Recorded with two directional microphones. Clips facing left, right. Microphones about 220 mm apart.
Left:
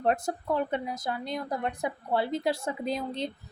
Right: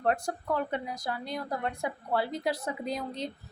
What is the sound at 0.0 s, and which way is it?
A woman's voice, 20° left (ahead or behind).